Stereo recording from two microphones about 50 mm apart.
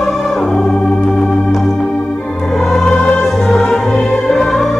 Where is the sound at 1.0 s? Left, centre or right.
Centre.